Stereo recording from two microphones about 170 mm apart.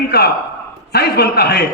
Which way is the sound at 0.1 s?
70° left (ahead or behind).